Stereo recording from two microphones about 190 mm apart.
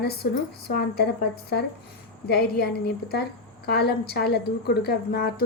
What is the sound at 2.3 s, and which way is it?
A woman's voice, 55° left (ahead or behind).